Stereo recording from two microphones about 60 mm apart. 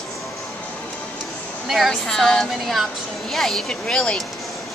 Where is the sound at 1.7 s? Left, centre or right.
Centre.